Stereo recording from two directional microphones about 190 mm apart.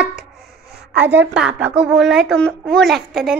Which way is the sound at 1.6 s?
5° right (ahead or behind).